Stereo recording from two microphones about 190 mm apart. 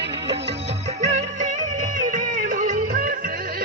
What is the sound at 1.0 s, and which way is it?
Music, 35° right (ahead or behind).